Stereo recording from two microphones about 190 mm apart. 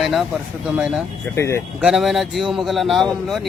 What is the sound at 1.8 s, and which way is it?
A man's voice, centre (ahead or behind).